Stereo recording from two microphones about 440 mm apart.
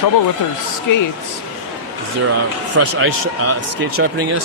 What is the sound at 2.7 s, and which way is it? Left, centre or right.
Speech, right.